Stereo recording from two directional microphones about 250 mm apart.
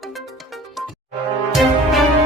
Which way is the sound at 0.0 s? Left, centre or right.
Centre.